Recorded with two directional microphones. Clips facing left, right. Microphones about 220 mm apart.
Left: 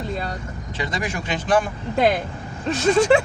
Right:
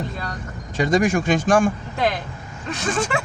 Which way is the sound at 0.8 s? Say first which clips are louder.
Right 9 dB; 45° right (ahead or behind).